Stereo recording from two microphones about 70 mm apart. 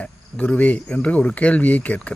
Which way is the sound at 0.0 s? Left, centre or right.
Left.